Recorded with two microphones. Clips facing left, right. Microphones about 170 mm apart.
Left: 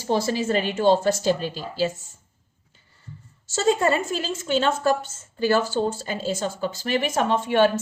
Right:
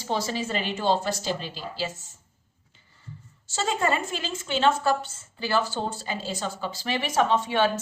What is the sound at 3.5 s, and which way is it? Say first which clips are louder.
Speech: left 5 dB; 45° left (ahead or behind).